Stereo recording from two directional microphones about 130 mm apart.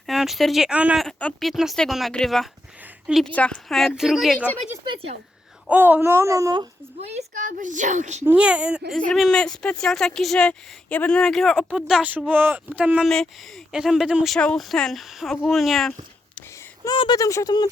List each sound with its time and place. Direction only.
0.1 s a woman's voice: centre (ahead or behind)
1.0 s a woman's voice: 5° left (ahead or behind)
5.6 s speech: 15° right (ahead or behind)
7.0 s a woman's voice: 55° right (ahead or behind)
8.2 s speech: 10° right (ahead or behind)
9.0 s a woman's voice: 5° left (ahead or behind)
14.3 s a woman's voice: 5° left (ahead or behind)
16.9 s speech: 35° left (ahead or behind)